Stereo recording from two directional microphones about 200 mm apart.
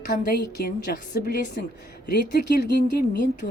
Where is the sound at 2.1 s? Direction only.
55° left (ahead or behind).